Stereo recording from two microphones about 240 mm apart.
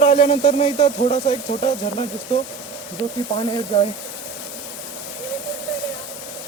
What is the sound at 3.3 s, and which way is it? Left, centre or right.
Speech, left.